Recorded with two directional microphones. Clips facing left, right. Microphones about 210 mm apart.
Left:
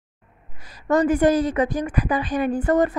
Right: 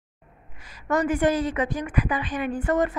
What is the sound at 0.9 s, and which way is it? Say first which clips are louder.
A woman's voice: left 5 dB; 35° left (ahead or behind).